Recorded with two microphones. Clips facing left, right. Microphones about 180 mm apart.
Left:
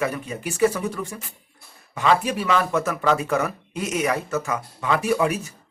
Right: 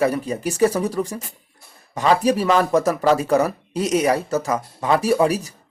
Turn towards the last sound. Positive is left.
turn(degrees=-35)  # may be behind; listen again after turning